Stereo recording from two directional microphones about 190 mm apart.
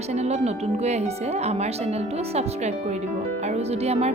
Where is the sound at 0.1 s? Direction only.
35° right (ahead or behind).